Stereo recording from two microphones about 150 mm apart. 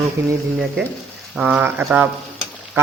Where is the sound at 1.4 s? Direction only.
10° right (ahead or behind).